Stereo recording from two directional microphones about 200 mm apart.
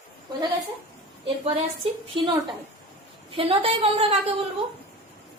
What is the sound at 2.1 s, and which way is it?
A woman's voice, 25° right (ahead or behind).